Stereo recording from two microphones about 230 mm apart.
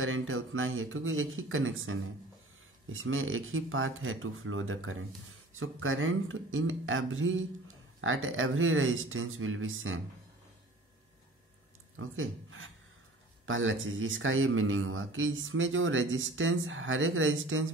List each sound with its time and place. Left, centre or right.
0.0 s speech: right
12.0 s speech: right